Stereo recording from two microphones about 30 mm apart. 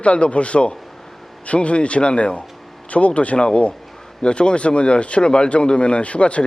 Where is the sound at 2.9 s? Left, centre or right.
Left.